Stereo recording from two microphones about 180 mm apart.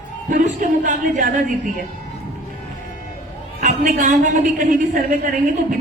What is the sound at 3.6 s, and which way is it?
A woman's voice, 45° right (ahead or behind).